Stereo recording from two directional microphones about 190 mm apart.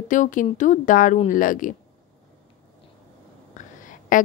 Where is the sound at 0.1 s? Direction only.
45° left (ahead or behind).